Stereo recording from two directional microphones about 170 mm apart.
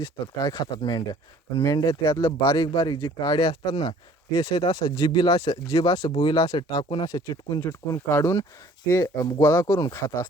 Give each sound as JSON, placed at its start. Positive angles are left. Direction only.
{"t": 0.0, "sound": "speech", "side_deg": 25}